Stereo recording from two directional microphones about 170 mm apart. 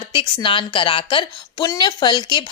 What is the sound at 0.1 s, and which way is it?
Speech, 30° left (ahead or behind).